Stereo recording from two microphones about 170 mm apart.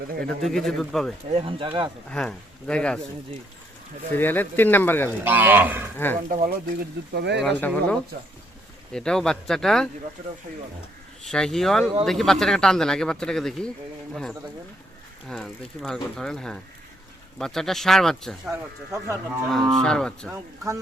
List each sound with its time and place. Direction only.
0.3 s speech: centre (ahead or behind)
1.3 s speech: 35° right (ahead or behind)
2.0 s speech: 5° left (ahead or behind)
4.1 s speech: 10° left (ahead or behind)
5.2 s speech: 10° right (ahead or behind)
6.2 s speech: 55° right (ahead or behind)
7.1 s speech: 85° right
7.4 s speech: 10° left (ahead or behind)
11.2 s speech: 5° left (ahead or behind)
15.3 s speech: centre (ahead or behind)
18.9 s speech: 15° right (ahead or behind)
19.5 s speech: centre (ahead or behind)